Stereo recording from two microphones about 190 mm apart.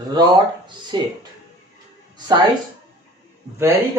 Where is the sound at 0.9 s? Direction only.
25° right (ahead or behind).